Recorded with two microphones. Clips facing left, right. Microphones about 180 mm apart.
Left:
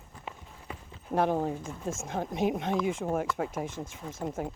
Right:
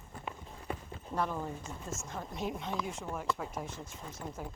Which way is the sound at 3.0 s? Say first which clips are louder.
Left 10 dB; 55° left (ahead or behind).